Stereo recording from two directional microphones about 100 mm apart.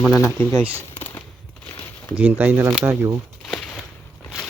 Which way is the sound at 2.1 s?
20° right (ahead or behind).